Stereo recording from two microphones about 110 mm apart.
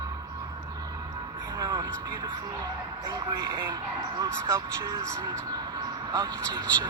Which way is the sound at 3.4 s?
40° right (ahead or behind).